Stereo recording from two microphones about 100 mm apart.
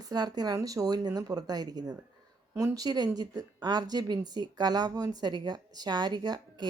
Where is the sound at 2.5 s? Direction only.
30° right (ahead or behind).